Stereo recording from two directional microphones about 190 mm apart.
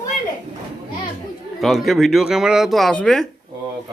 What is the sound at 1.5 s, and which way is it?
Speech, centre (ahead or behind).